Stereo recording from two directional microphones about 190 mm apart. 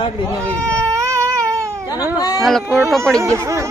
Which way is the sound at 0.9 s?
15° right (ahead or behind).